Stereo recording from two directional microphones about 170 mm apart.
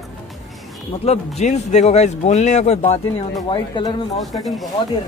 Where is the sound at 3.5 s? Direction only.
30° left (ahead or behind).